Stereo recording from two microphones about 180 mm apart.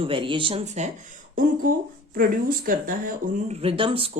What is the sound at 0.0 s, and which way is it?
Speech, 30° right (ahead or behind).